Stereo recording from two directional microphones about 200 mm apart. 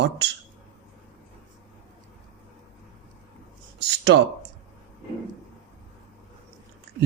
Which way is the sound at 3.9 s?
60° right (ahead or behind).